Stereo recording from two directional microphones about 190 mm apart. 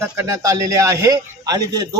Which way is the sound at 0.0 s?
15° right (ahead or behind).